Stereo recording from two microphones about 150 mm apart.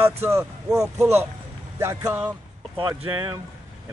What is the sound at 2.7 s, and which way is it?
Speech, 30° right (ahead or behind).